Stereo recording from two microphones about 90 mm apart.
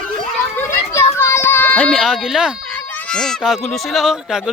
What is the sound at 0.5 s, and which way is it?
Children playing, 25° left (ahead or behind).